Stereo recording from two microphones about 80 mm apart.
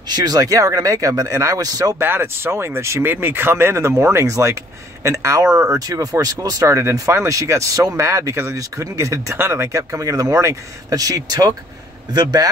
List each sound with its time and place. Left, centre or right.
0.1 s speech: right
2.0 s speech: right